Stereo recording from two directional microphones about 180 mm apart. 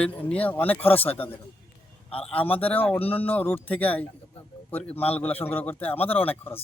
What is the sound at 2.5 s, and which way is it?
Speech, 10° left (ahead or behind).